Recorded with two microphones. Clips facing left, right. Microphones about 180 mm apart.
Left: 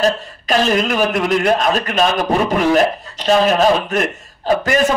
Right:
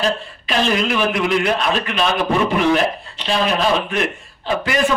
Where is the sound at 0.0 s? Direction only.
40° left (ahead or behind).